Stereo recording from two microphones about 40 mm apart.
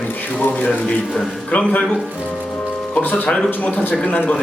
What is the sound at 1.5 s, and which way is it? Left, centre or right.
Speech, left.